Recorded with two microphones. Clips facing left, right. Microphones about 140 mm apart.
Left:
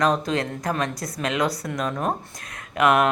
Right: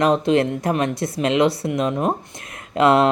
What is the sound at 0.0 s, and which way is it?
Speech, 25° right (ahead or behind).